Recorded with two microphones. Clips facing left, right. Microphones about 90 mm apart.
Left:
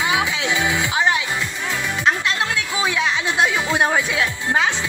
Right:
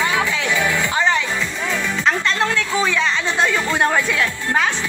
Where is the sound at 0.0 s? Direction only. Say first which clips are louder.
Right 1 dB; 15° left (ahead or behind).